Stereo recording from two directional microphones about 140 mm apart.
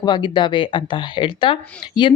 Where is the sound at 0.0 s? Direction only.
35° left (ahead or behind).